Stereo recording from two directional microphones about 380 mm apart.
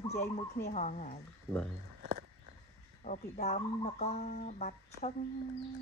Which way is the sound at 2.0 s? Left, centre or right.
Right.